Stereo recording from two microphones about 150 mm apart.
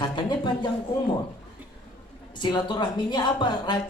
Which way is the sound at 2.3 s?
30° left (ahead or behind).